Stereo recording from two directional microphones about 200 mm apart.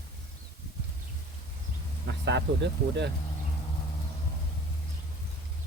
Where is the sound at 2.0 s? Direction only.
60° right (ahead or behind).